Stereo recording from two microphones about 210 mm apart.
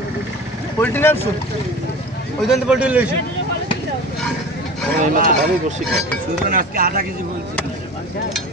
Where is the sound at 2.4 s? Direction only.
5° right (ahead or behind).